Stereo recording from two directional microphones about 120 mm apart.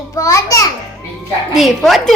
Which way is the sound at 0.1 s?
30° left (ahead or behind).